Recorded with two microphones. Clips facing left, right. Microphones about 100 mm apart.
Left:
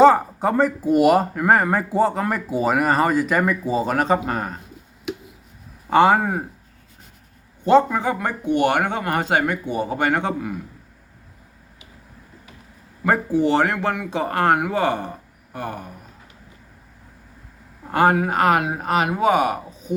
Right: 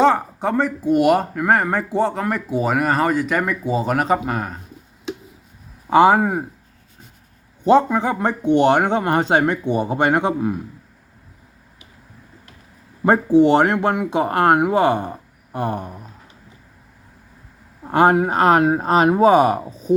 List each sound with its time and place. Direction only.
0.0 s speech: 5° left (ahead or behind)
5.9 s speech: 15° right (ahead or behind)
7.6 s speech: 15° right (ahead or behind)
13.1 s speech: 20° right (ahead or behind)
17.9 s speech: 20° right (ahead or behind)